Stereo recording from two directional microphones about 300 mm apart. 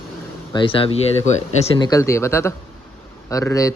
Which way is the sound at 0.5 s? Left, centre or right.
Centre.